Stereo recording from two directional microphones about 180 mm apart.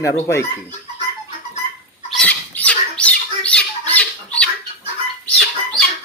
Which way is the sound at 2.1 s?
5° left (ahead or behind).